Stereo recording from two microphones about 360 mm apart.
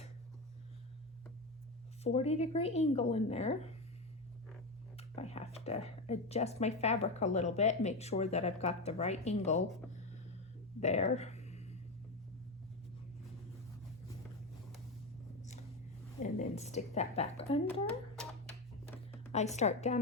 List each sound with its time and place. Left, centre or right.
2.0 s speech: centre
4.9 s speech: centre
10.8 s a sound: centre
16.2 s speech: centre
19.3 s a woman's voice: centre